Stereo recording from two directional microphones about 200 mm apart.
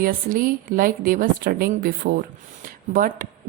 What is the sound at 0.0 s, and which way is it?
Speech, 45° right (ahead or behind).